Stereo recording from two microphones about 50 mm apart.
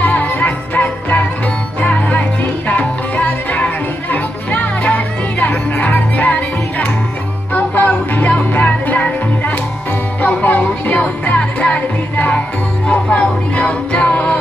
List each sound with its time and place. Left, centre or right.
0.0 s music: left
7.5 s music: left
10.2 s music: left